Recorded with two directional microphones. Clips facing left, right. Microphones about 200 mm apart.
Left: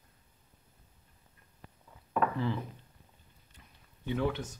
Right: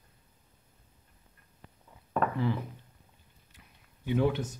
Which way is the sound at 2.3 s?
15° right (ahead or behind).